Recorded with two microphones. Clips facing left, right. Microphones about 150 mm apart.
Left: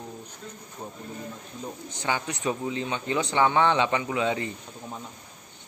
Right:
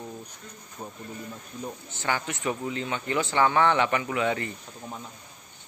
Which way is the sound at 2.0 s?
15° left (ahead or behind).